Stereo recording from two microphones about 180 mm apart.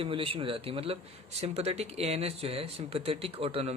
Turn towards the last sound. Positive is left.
turn(degrees=-35)  # may be behind; listen again after turning